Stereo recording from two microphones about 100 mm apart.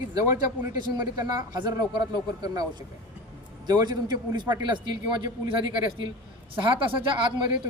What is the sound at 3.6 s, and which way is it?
A man's voice, 45° right (ahead or behind).